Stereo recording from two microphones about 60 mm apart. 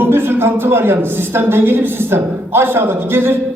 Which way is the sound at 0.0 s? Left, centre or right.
Right.